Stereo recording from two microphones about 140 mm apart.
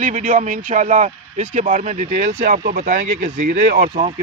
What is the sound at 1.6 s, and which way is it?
Speech, 65° right (ahead or behind).